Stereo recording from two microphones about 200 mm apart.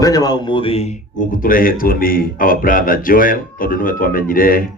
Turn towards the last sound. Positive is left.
turn(degrees=45)  # may be behind; listen again after turning